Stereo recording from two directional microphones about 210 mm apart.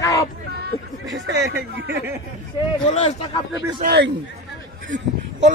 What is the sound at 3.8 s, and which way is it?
Speech, 50° right (ahead or behind).